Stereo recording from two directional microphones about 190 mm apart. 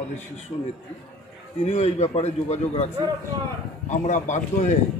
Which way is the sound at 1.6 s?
35° left (ahead or behind).